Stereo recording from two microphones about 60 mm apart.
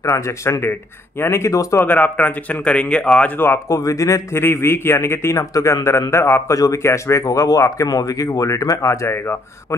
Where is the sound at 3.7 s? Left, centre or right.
Left.